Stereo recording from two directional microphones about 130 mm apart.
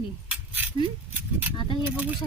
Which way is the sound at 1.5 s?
40° left (ahead or behind).